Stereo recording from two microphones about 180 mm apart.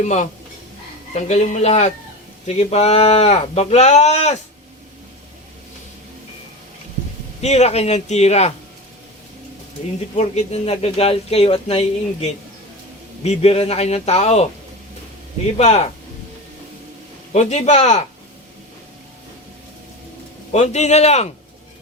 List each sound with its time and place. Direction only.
0.0 s speech: 40° left (ahead or behind)
7.4 s speech: 35° left (ahead or behind)
10.2 s speech: 35° left (ahead or behind)
13.2 s speech: 35° left (ahead or behind)
15.5 s speech: 35° left (ahead or behind)
17.3 s speech: 35° left (ahead or behind)
20.5 s speech: 40° left (ahead or behind)